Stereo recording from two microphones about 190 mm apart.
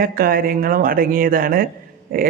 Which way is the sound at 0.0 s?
50° right (ahead or behind).